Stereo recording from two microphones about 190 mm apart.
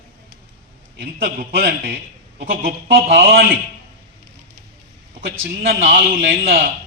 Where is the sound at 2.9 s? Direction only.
75° right (ahead or behind).